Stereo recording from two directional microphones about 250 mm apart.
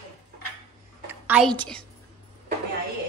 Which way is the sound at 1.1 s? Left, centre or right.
Centre.